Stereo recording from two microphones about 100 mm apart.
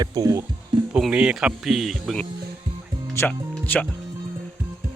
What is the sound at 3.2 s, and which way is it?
Speech, 25° left (ahead or behind).